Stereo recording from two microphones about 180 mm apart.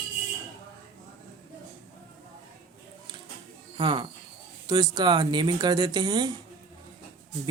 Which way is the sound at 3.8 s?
25° right (ahead or behind).